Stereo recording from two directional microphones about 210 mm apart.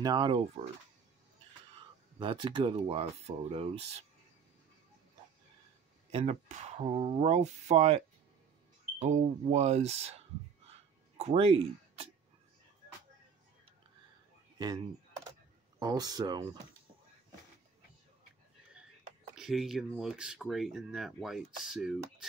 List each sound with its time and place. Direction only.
0.0 s speech: 20° right (ahead or behind)
2.1 s speech: 25° right (ahead or behind)
6.1 s speech: 30° right (ahead or behind)
9.0 s speech: 30° right (ahead or behind)
15.8 s speech: 20° right (ahead or behind)
19.3 s speech: centre (ahead or behind)